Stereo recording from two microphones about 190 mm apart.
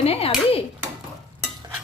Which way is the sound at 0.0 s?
30° left (ahead or behind).